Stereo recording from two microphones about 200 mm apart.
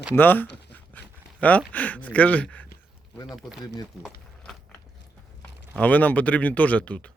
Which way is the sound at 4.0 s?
Centre (ahead or behind).